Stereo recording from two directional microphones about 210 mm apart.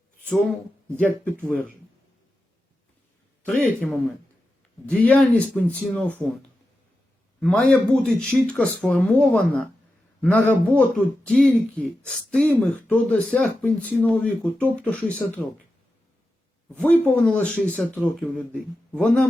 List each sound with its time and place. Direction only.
0.3 s speech: 5° left (ahead or behind)
3.4 s speech: 5° left (ahead or behind)
6.1 s speech: 10° right (ahead or behind)
7.3 s a man's voice: 5° left (ahead or behind)
16.7 s speech: 5° left (ahead or behind)